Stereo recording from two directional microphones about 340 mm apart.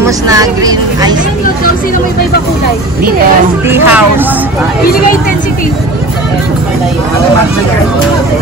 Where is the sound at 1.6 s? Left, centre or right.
Left.